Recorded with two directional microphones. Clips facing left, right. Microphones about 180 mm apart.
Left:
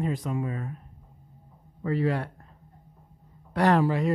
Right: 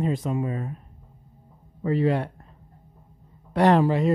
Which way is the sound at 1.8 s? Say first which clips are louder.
Right 4 dB; 20° right (ahead or behind).